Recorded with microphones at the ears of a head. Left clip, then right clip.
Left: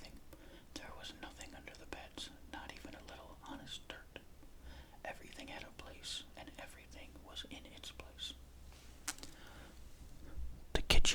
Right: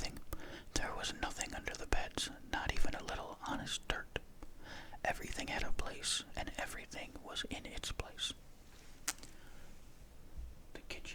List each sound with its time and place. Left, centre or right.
0.0 s whispering: right
10.7 s whispering: left